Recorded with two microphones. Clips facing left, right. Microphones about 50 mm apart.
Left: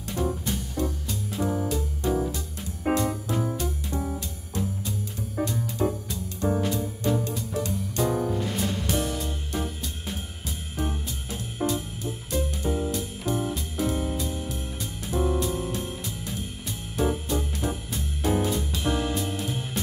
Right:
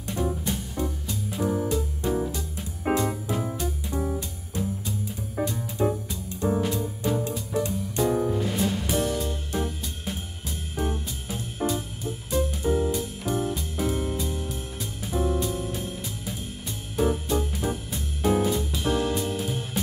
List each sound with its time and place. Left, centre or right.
0.1 s music: centre
5.8 s music: centre
6.5 s music: centre